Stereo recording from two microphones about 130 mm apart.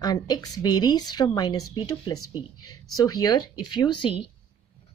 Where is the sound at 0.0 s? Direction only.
30° left (ahead or behind).